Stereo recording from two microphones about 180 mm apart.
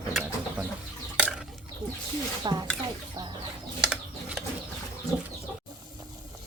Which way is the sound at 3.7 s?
5° right (ahead or behind).